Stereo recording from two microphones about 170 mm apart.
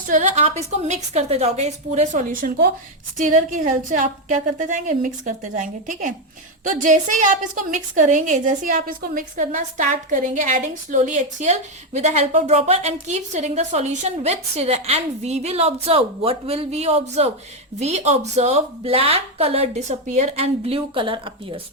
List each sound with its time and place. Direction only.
0.1 s a woman's voice: 45° right (ahead or behind)